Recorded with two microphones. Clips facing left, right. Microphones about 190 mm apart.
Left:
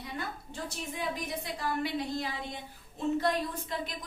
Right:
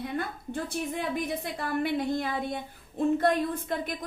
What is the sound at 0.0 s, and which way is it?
A woman's voice, 55° right (ahead or behind).